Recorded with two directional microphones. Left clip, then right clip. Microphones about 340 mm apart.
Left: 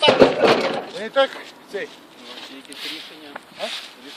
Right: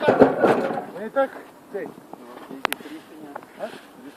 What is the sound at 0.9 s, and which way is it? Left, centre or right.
Speech, centre.